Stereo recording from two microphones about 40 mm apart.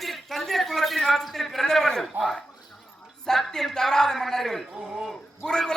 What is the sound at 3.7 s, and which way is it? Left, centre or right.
Speech, centre.